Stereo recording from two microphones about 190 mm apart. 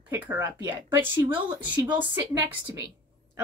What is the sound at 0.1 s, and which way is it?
Speech, 10° right (ahead or behind).